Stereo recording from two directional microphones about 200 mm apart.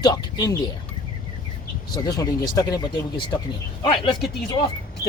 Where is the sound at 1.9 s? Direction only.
20° left (ahead or behind).